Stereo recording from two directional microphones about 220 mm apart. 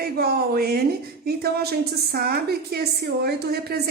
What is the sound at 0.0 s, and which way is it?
A woman's voice, 45° right (ahead or behind).